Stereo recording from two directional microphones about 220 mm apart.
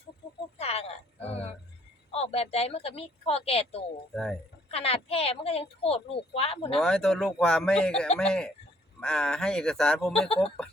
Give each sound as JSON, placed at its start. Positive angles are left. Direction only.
{"t": 0.6, "sound": "a sound", "side_deg": 30}
{"t": 2.1, "sound": "a woman's voice", "side_deg": 25}
{"t": 4.1, "sound": "speech", "side_deg": 0}
{"t": 4.7, "sound": "a woman's voice", "side_deg": 25}
{"t": 6.7, "sound": "speech", "side_deg": 5}
{"t": 10.1, "sound": "a woman's voice", "side_deg": 25}